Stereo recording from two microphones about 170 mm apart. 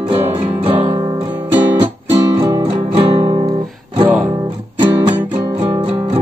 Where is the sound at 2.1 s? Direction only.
20° right (ahead or behind).